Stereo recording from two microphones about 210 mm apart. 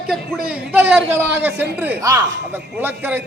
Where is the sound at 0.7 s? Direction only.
5° right (ahead or behind).